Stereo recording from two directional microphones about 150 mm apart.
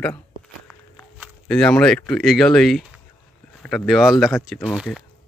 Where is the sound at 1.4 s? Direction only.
5° left (ahead or behind).